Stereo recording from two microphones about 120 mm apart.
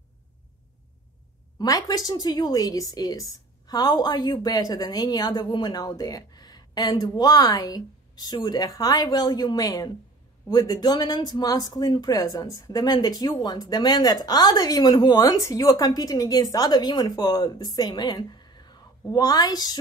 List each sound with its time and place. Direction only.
1.6 s speech: 35° left (ahead or behind)